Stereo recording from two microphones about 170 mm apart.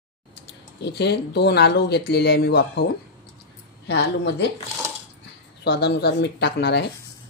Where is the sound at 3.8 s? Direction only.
80° left.